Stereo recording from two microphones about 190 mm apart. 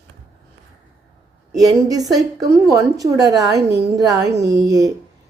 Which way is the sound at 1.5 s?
20° right (ahead or behind).